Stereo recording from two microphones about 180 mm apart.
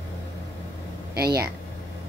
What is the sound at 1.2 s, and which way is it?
Speech, 60° right (ahead or behind).